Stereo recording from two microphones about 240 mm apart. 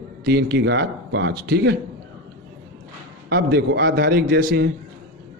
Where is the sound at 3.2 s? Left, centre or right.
Right.